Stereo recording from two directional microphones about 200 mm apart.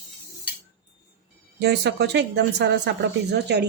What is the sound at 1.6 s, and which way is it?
Speech, 55° right (ahead or behind).